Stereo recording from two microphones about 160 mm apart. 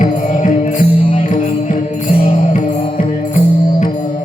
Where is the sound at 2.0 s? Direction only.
40° left (ahead or behind).